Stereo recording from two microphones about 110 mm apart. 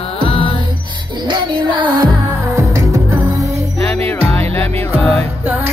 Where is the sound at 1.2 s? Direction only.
45° right (ahead or behind).